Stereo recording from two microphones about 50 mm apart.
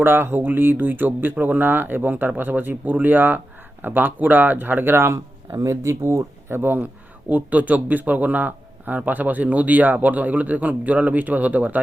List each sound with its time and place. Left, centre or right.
0.0 s speech: right
7.3 s speech: right